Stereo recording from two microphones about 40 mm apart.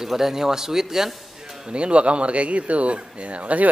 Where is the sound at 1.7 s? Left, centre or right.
Right.